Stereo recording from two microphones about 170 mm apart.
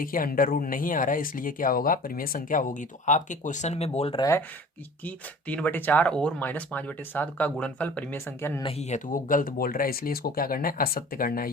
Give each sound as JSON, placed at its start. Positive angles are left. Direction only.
{"t": 0.0, "sound": "speech", "side_deg": 55}
{"t": 4.2, "sound": "speech", "side_deg": 15}
{"t": 8.6, "sound": "speech", "side_deg": 40}